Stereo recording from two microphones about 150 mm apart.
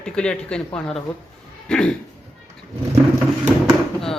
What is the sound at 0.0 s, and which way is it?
A woman's voice, 5° left (ahead or behind).